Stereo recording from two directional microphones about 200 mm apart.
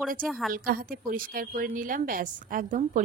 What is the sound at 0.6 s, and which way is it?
A woman's voice, 45° right (ahead or behind).